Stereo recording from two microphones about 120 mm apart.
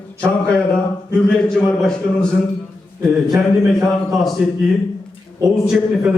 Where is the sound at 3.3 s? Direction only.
20° right (ahead or behind).